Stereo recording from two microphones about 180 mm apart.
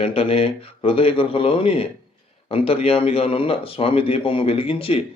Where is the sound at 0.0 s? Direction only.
30° left (ahead or behind).